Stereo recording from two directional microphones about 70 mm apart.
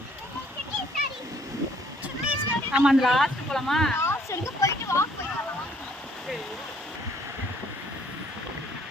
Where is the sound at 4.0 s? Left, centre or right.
Left.